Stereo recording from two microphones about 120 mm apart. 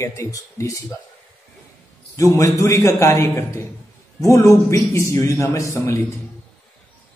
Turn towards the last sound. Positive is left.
turn(degrees=25)  # may be behind; listen again after turning